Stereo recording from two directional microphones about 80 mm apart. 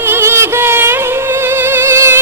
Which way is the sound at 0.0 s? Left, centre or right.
Right.